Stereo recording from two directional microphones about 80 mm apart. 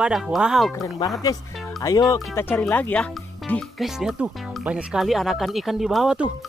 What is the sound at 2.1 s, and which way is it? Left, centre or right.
Speech, left.